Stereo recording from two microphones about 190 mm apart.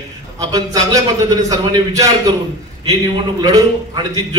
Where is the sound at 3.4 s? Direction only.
20° right (ahead or behind).